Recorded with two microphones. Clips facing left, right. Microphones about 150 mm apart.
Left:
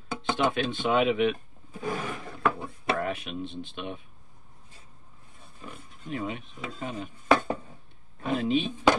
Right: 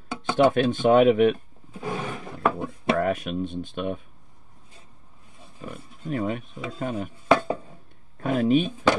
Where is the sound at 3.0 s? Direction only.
45° right (ahead or behind).